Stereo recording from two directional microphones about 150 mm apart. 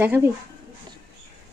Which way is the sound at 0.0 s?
15° right (ahead or behind).